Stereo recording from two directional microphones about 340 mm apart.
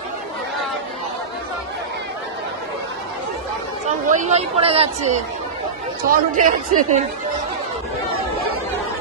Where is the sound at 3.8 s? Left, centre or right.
Centre.